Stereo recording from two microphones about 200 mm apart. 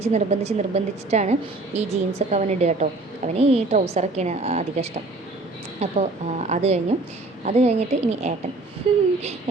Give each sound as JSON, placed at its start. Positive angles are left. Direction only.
{"t": 0.0, "sound": "a woman's voice", "side_deg": -30}